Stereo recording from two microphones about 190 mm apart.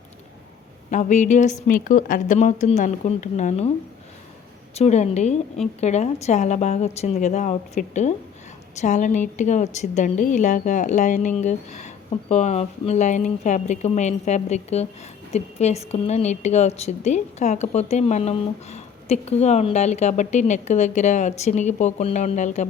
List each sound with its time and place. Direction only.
0.9 s a woman's voice: 40° left (ahead or behind)
4.7 s a woman's voice: 35° left (ahead or behind)